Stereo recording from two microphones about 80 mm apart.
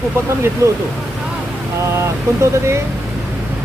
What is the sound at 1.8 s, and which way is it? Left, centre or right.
Speech, right.